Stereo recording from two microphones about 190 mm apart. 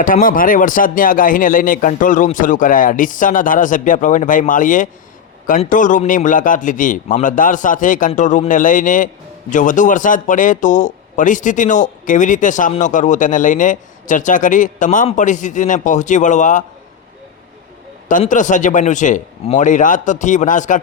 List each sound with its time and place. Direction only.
0.0 s speech: 45° left (ahead or behind)
18.1 s speech: 40° left (ahead or behind)